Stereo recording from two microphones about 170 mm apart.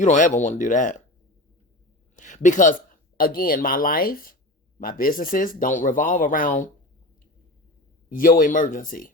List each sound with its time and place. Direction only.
0.0 s speech: 45° left (ahead or behind)
2.1 s speech: 45° left (ahead or behind)
8.1 s speech: 55° left (ahead or behind)